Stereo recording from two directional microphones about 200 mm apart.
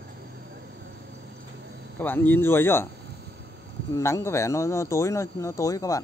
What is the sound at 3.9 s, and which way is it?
Speech, 15° left (ahead or behind).